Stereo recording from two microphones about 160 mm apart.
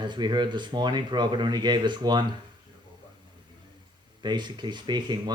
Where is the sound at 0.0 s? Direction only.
30° right (ahead or behind).